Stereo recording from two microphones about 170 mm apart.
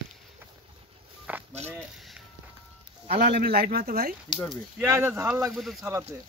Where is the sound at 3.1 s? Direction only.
70° right (ahead or behind).